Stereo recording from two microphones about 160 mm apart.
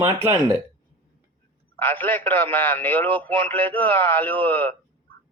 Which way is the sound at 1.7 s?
10° left (ahead or behind).